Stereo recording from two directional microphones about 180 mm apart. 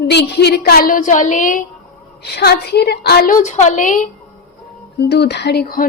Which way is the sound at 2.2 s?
65° left (ahead or behind).